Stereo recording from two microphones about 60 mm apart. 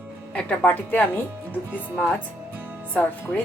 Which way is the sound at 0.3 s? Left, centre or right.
Left.